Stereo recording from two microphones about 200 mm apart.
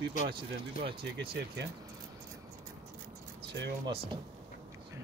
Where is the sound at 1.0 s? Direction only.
60° right (ahead or behind).